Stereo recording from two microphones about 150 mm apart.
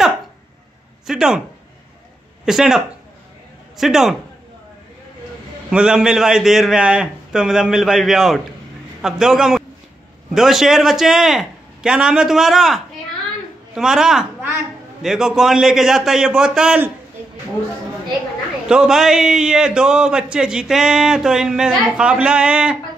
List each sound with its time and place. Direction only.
1.0 s speech: 5° right (ahead or behind)
2.4 s a man's voice: 5° right (ahead or behind)
5.7 s a man's voice: 5° right (ahead or behind)
18.7 s a man's voice: 5° right (ahead or behind)